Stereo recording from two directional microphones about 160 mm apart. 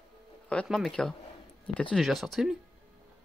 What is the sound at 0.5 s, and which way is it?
Speech, 5° left (ahead or behind).